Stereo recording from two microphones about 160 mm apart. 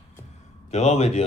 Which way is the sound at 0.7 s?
45° left (ahead or behind).